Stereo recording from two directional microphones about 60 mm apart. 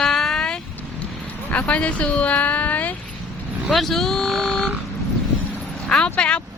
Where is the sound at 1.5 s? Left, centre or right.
Left.